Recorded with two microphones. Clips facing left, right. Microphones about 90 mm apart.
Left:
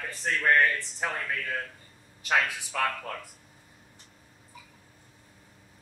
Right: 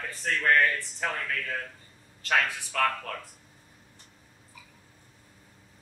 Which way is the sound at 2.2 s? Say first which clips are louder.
Even; 15° left (ahead or behind).